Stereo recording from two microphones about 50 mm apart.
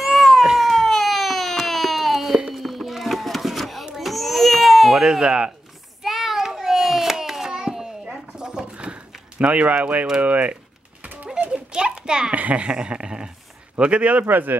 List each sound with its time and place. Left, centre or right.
0.0 s cat: centre
0.6 s a sound: centre
5.0 s speech: centre
6.0 s hands: centre; by 9.0 s right
9.4 s speech: right
10.2 s typing: right
11.5 s a sound: centre
13.7 s speech: right
14.2 s speech: right